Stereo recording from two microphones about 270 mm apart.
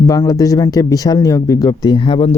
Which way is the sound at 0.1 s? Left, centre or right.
Centre.